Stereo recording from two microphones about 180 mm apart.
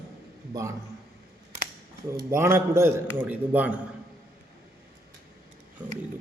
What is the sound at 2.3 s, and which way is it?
A man's voice, 15° right (ahead or behind).